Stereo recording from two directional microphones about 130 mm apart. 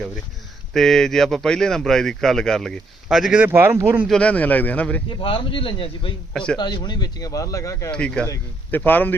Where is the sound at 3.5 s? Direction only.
20° right (ahead or behind).